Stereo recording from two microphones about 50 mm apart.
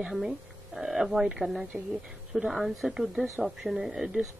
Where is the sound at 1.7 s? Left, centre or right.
Right.